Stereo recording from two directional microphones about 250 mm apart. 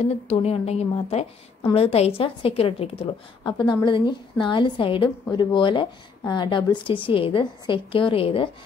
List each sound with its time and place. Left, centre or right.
0.0 s a woman's voice: left